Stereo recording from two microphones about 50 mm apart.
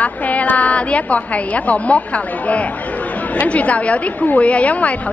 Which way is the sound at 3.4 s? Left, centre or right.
Left.